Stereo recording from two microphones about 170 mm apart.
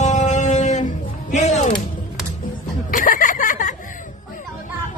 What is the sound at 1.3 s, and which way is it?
Music, 45° left (ahead or behind).